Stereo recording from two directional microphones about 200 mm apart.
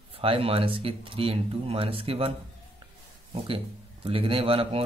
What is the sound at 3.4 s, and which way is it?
Speech, 25° right (ahead or behind).